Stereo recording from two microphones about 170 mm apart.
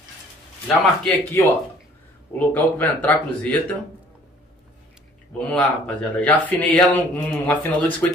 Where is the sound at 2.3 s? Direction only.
10° left (ahead or behind).